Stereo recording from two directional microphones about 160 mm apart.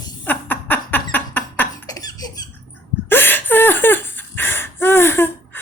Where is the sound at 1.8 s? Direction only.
25° left (ahead or behind).